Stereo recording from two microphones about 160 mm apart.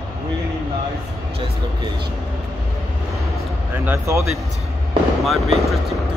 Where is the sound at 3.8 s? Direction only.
15° right (ahead or behind).